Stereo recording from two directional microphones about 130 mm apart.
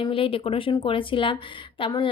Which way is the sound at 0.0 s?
45° left (ahead or behind).